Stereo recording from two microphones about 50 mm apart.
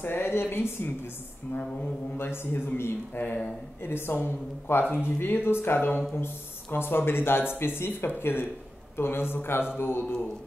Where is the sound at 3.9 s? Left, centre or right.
Left.